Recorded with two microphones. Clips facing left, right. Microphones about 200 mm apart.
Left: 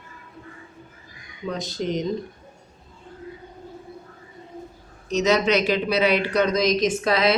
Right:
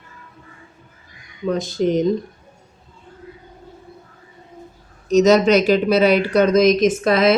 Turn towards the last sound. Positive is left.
turn(degrees=-50)  # may be behind; listen again after turning